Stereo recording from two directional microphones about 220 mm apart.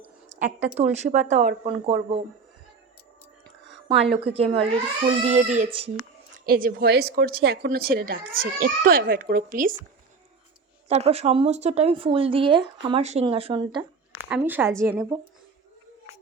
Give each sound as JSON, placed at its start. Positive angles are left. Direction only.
{"t": 0.3, "sound": "speech", "side_deg": -35}
{"t": 3.8, "sound": "speech", "side_deg": -25}
{"t": 6.3, "sound": "speech", "side_deg": -40}
{"t": 10.8, "sound": "speech", "side_deg": -30}
{"t": 14.2, "sound": "speech", "side_deg": -5}